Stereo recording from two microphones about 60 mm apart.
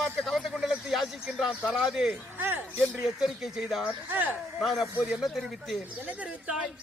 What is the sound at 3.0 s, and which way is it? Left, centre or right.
Speech, centre.